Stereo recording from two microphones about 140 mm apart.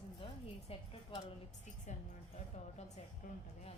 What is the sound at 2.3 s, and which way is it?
Speech, 55° left (ahead or behind).